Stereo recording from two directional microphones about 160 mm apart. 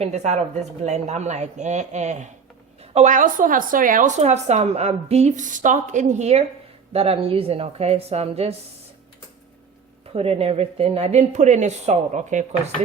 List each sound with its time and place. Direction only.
0.0 s speech: 45° right (ahead or behind)
10.1 s speech: 40° right (ahead or behind)